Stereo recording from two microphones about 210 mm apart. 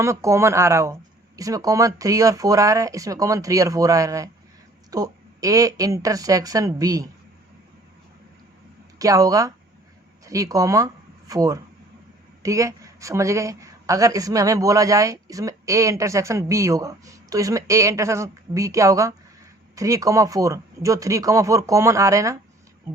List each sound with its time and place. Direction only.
0.0 s speech: 15° right (ahead or behind)
9.0 s speech: 15° right (ahead or behind)